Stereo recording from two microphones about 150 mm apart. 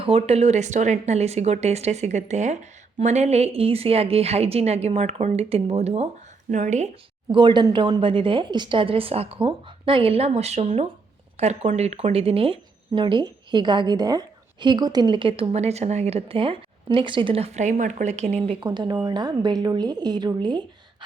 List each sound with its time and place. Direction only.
0.0 s a woman's voice: 40° right (ahead or behind)
7.3 s speech: 30° right (ahead or behind); by 18.5 s 50° right (ahead or behind)
18.6 s a woman's voice: 30° right (ahead or behind)